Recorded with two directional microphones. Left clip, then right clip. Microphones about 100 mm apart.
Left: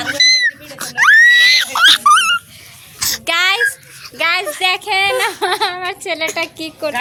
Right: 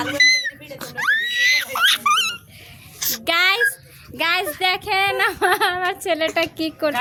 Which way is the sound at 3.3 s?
80° right.